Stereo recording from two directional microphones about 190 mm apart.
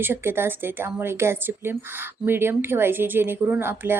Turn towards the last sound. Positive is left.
turn(degrees=-10)  # may be behind; listen again after turning